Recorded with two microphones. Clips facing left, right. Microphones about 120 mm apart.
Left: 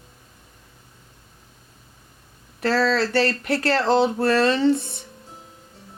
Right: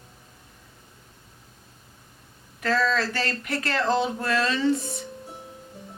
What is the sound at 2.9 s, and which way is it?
Speech, 35° left (ahead or behind).